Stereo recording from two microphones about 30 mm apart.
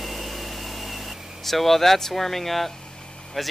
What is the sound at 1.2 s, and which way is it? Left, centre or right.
Vehicle, centre.